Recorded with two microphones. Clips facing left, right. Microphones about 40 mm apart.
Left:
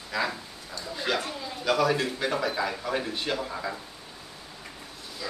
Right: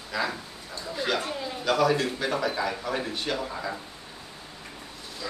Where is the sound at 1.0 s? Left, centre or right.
Centre.